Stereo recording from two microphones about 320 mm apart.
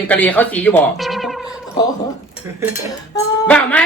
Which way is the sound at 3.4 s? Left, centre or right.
Centre.